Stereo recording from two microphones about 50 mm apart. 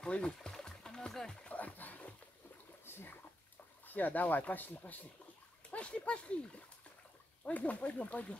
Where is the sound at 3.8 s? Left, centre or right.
Left.